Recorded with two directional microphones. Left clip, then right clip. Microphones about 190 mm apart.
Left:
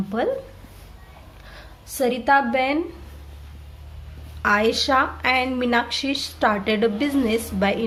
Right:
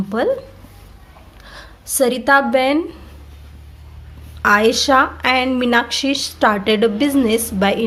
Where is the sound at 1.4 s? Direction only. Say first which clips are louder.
Right 8 dB; 25° right (ahead or behind).